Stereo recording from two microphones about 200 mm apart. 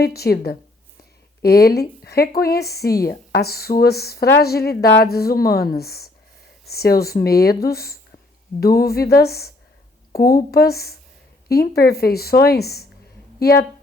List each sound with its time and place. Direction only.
0.0 s a woman's voice: 50° left (ahead or behind)